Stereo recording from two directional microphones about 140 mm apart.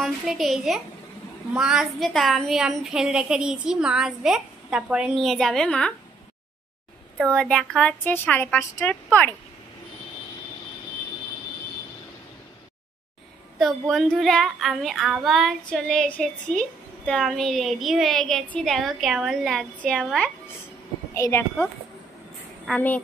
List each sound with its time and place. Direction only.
0.0 s child singing: centre (ahead or behind)
7.3 s speech: 5° left (ahead or behind)
13.6 s child singing: centre (ahead or behind)
21.1 s speech: 20° left (ahead or behind)
22.7 s child singing: 5° left (ahead or behind)